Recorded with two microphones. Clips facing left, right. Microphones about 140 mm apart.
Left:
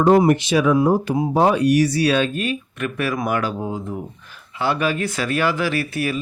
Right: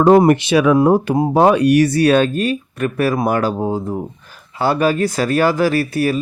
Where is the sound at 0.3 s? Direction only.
65° right (ahead or behind).